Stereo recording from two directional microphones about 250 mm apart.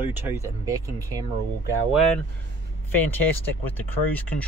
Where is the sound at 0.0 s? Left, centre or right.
Centre.